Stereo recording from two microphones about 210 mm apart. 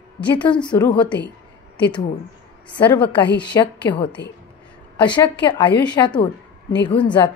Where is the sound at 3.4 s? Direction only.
20° left (ahead or behind).